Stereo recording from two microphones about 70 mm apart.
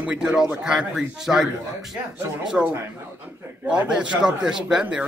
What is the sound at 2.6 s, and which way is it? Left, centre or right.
Speech, centre.